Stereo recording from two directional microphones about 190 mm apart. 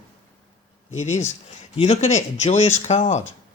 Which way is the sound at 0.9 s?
35° left (ahead or behind).